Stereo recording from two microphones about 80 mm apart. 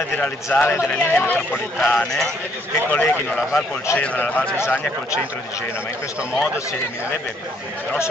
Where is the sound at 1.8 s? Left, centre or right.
Centre.